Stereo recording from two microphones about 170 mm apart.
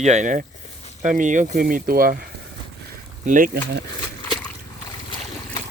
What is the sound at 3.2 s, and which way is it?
Speech, 50° right (ahead or behind).